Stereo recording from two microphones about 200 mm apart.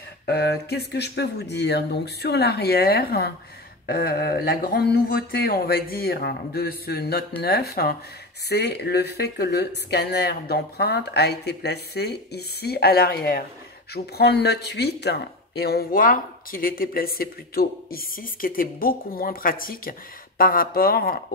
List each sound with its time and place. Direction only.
0.3 s speech: 50° left (ahead or behind)